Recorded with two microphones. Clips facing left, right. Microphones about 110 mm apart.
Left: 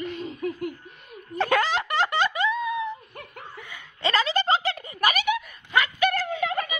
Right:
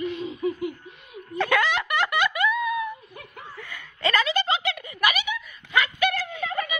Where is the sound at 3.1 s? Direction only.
65° left (ahead or behind).